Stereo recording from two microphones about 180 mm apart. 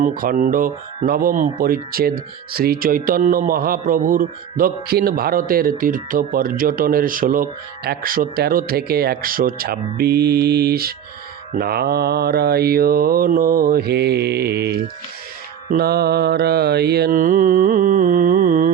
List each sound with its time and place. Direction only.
0.0 s speech: 50° right (ahead or behind)
11.5 s mantra: 60° right (ahead or behind)
15.7 s speech: 60° right (ahead or behind)